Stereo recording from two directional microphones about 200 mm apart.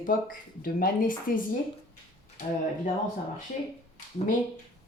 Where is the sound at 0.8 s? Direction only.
45° left (ahead or behind).